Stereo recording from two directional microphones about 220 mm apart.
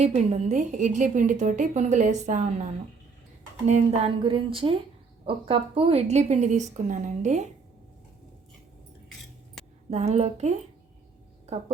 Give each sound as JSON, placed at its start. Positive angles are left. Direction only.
{"t": 0.0, "sound": "a woman's voice", "side_deg": -30}
{"t": 3.7, "sound": "a woman's voice", "side_deg": -30}
{"t": 9.9, "sound": "speech", "side_deg": -30}